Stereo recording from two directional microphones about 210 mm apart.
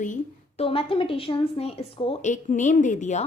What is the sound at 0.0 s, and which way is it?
A woman's voice, 35° left (ahead or behind).